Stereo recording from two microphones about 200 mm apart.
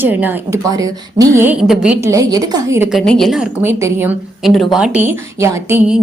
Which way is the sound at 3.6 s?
10° right (ahead or behind).